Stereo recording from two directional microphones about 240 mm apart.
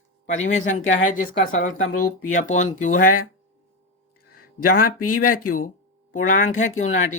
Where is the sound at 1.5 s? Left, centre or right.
Left.